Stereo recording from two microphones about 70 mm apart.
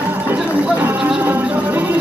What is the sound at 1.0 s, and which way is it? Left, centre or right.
Music, centre.